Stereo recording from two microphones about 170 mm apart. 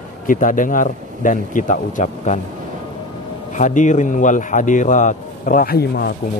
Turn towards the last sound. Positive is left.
turn(degrees=65)  # may be behind; listen again after turning